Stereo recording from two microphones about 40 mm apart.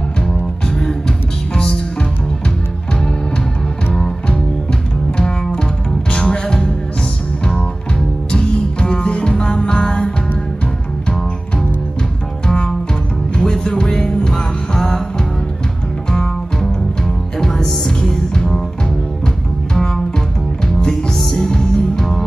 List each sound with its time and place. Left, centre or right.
0.2 s music: centre
3.9 s music: centre
13.4 s music: centre
17.4 s music: centre
19.7 s music: centre